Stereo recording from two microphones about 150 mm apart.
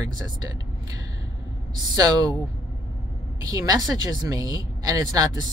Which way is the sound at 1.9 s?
25° right (ahead or behind).